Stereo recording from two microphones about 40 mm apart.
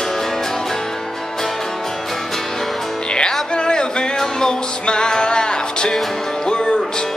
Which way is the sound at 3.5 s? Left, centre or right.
Left.